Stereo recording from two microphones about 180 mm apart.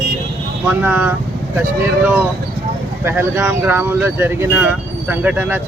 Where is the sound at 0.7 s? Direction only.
10° right (ahead or behind).